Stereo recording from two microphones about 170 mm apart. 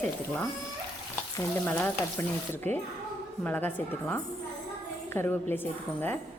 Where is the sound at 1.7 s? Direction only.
10° left (ahead or behind).